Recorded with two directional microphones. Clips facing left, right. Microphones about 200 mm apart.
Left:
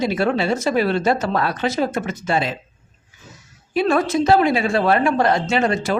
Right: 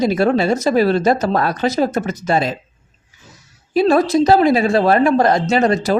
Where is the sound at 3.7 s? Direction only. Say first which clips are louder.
Right 5 dB; 35° right (ahead or behind).